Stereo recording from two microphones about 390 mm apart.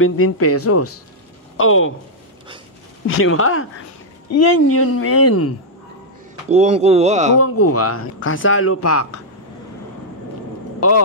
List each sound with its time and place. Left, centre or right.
0.0 s speech: left
3.1 s speech: left
6.5 s speech: centre
7.3 s speech: left
10.8 s speech: left